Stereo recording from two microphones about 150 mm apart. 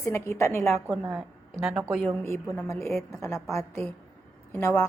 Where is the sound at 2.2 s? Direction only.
20° left (ahead or behind).